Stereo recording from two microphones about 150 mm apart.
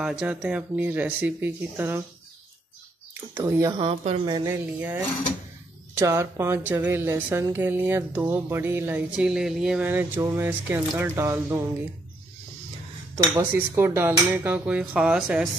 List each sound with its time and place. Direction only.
0.0 s speech: 5° right (ahead or behind)
3.3 s speech: 20° right (ahead or behind)
3.7 s speech: 40° right (ahead or behind)
4.3 s speech: 25° right (ahead or behind)
4.7 s speech: 10° right (ahead or behind)
13.1 s cutlery: 20° right (ahead or behind)
13.4 s speech: 15° right (ahead or behind)